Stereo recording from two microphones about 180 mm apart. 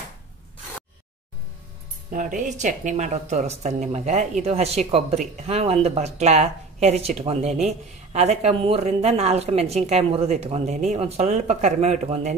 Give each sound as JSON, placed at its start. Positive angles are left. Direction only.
{"t": 2.0, "sound": "speech", "side_deg": -45}